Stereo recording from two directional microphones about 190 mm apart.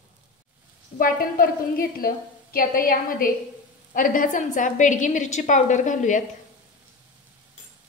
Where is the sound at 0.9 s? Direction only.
50° left (ahead or behind).